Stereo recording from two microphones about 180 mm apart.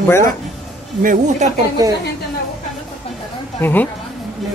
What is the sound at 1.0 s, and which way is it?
Speech, 40° right (ahead or behind).